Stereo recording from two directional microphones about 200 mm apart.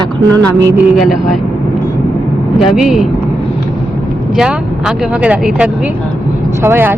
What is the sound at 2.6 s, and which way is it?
Speech, 5° right (ahead or behind).